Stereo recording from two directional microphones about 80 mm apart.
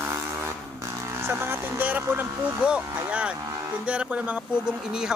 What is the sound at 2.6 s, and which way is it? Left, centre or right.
Speech, centre.